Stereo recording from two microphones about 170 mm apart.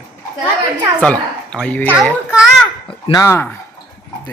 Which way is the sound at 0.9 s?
5° left (ahead or behind).